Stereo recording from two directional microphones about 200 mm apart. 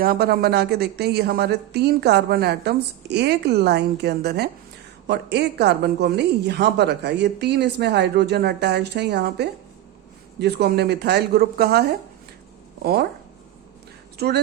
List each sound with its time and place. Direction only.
0.0 s a woman's voice: 50° right (ahead or behind)